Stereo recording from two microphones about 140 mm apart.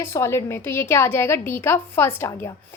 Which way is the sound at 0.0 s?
20° left (ahead or behind).